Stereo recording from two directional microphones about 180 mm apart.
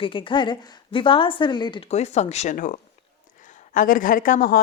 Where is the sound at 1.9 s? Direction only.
40° left (ahead or behind).